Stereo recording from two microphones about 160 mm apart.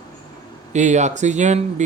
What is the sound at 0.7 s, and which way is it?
Speech, 45° right (ahead or behind).